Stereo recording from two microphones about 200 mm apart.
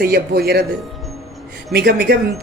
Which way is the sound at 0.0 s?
50° right (ahead or behind).